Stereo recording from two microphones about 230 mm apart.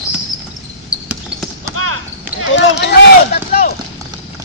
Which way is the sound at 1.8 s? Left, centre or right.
Right.